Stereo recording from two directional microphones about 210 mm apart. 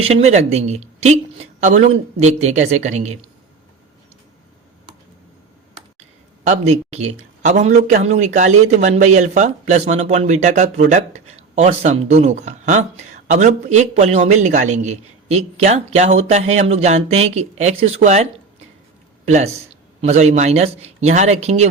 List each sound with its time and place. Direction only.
0.0 s a man's voice: 30° right (ahead or behind)
6.4 s a man's voice: 35° right (ahead or behind)